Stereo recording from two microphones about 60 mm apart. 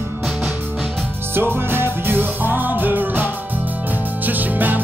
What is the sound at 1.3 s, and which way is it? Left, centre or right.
Music, right.